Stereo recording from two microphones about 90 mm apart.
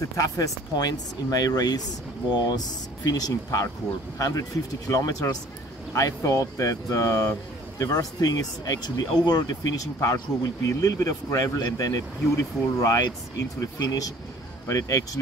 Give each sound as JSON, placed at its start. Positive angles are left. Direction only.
{"t": 0.2, "sound": "speech", "side_deg": 45}